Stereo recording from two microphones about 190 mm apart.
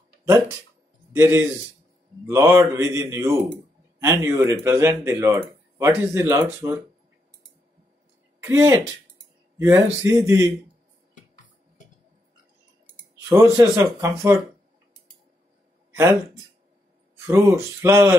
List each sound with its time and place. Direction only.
1.1 s a man's voice: 15° right (ahead or behind)
8.4 s speech: 15° right (ahead or behind)
13.3 s speech: 15° right (ahead or behind)
17.3 s speech: 15° right (ahead or behind)